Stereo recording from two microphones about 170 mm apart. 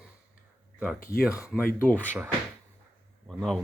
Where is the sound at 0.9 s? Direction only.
55° left (ahead or behind).